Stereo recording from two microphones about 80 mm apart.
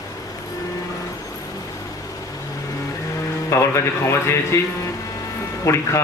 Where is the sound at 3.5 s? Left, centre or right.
Left.